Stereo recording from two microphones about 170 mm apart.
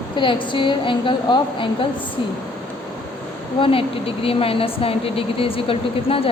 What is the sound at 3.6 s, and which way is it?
Speech, 30° left (ahead or behind).